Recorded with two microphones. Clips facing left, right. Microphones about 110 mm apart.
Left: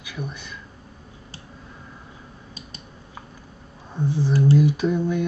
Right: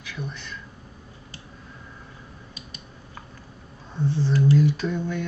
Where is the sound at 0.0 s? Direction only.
15° left (ahead or behind).